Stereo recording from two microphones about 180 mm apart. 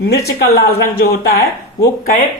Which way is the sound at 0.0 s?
60° left (ahead or behind).